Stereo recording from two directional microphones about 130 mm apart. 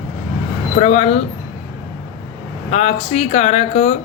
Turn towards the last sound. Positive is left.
turn(degrees=55)  # may be behind; listen again after turning